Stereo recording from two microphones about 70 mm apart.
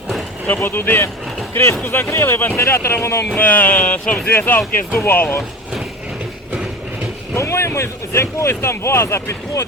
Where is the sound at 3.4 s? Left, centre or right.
Left.